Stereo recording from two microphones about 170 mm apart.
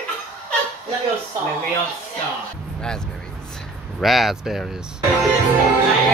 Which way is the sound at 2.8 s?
5° left (ahead or behind).